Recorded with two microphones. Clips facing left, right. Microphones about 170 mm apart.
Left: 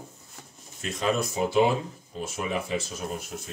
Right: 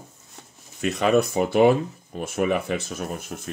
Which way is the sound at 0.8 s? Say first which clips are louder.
Right 7 dB; 70° right (ahead or behind).